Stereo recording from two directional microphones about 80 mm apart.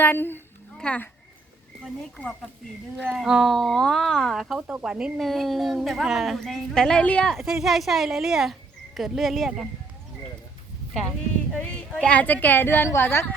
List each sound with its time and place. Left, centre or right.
0.0 s a woman's voice: left
0.8 s speech: centre
3.1 s speech: centre
5.2 s speech: centre
7.3 s speech: centre
11.5 s a woman's voice: centre